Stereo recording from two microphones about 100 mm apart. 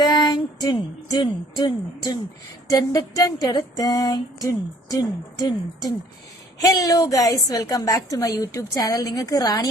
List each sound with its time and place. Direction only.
0.0 s a sound: 45° left (ahead or behind)
1.2 s speech: 50° left (ahead or behind)
2.6 s a woman's voice: 35° left (ahead or behind)